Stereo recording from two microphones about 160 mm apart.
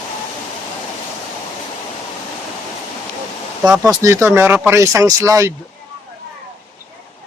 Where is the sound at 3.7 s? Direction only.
20° right (ahead or behind).